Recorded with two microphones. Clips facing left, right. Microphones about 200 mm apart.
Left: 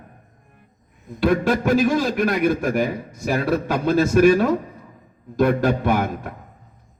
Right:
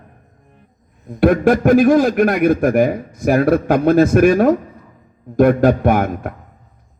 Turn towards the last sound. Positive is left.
turn(degrees=-55)  # may be behind; listen again after turning